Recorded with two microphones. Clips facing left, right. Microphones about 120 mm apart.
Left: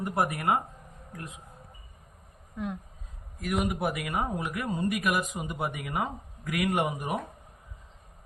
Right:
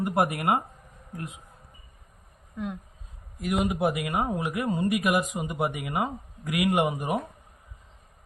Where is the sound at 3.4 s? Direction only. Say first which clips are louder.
Right 3 dB; 10° right (ahead or behind).